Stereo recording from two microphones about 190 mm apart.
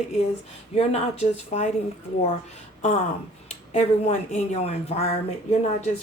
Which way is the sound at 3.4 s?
35° left (ahead or behind).